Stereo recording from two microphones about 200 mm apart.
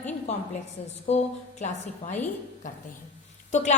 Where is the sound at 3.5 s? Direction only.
35° left (ahead or behind).